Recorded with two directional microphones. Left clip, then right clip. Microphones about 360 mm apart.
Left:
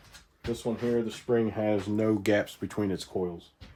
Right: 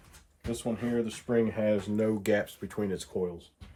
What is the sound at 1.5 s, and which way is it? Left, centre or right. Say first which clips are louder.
Speech: even; centre.